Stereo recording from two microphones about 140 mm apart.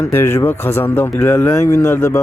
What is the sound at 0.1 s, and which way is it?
Speech, 15° left (ahead or behind).